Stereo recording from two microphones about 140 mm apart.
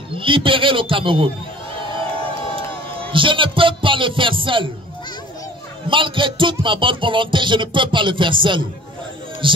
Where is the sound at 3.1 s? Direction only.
35° right (ahead or behind).